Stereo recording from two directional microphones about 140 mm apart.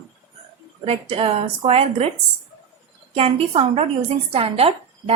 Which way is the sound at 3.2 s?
45° right (ahead or behind).